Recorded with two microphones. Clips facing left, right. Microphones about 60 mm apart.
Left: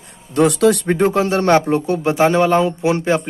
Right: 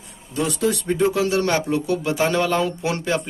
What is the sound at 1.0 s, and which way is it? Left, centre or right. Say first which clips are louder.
Speech: left 1 dB; left.